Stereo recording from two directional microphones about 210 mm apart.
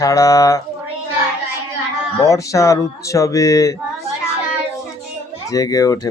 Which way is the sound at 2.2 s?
15° left (ahead or behind).